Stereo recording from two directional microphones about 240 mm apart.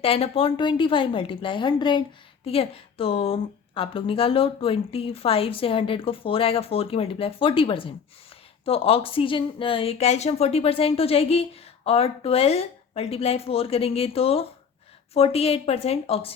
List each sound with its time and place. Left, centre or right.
0.0 s a woman's voice: left